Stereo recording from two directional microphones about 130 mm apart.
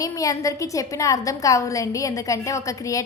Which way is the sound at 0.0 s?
25° left (ahead or behind).